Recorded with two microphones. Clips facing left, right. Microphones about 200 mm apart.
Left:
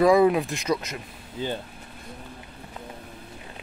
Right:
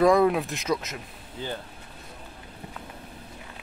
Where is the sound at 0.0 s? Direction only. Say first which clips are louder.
Left 2 dB; centre (ahead or behind).